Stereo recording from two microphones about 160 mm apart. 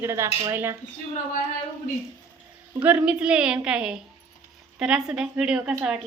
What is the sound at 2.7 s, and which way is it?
A woman's voice, 10° right (ahead or behind).